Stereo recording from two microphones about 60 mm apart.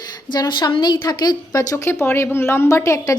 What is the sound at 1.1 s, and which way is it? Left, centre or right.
Speech, left.